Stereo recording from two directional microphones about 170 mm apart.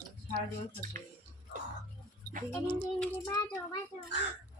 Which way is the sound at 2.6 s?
30° left (ahead or behind).